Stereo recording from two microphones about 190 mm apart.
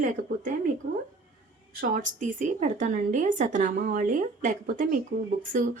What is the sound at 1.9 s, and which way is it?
Speech, 45° right (ahead or behind).